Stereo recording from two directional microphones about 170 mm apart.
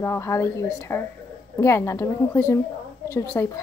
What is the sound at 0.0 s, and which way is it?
Speech, 15° left (ahead or behind).